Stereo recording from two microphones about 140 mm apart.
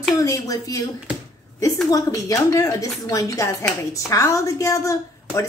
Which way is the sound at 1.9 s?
25° left (ahead or behind).